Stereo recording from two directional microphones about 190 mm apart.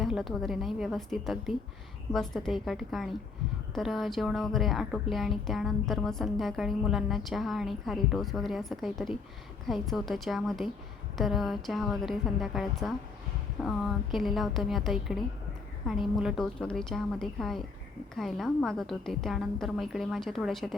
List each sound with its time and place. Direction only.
0.0 s a woman's voice: centre (ahead or behind)